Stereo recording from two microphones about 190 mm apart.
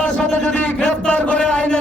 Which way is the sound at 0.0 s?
5° left (ahead or behind).